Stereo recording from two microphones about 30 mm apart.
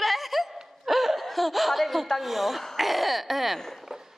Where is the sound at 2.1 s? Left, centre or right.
Centre.